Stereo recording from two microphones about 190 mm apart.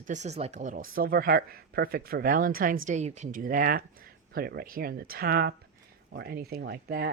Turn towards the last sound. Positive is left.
turn(degrees=-55)  # may be behind; listen again after turning